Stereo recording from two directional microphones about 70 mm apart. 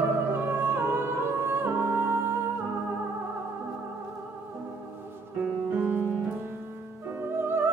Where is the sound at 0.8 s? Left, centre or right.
Right.